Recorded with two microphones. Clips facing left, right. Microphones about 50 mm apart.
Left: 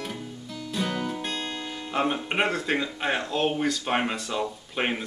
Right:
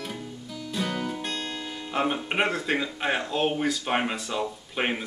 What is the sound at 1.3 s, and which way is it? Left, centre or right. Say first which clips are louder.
Music: left 1 dB; centre.